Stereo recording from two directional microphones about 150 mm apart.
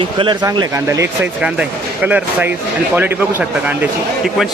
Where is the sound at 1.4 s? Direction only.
10° right (ahead or behind).